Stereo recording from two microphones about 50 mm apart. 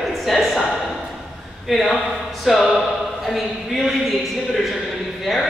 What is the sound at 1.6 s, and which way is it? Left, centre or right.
Speech, centre.